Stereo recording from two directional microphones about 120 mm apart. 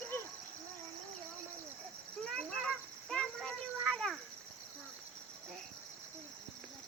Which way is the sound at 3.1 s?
5° left (ahead or behind).